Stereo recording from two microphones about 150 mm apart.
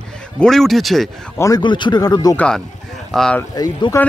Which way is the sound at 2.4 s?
5° left (ahead or behind).